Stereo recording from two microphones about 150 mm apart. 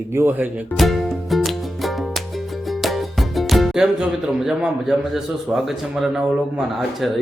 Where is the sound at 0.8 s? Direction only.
Centre (ahead or behind).